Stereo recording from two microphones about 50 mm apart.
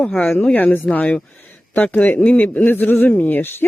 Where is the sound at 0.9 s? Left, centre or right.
Left.